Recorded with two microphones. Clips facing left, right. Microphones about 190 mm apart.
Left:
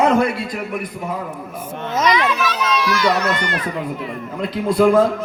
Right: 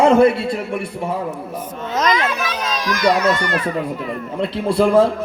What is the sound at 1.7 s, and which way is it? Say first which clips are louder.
Speech: left 2 dB; 65° left (ahead or behind).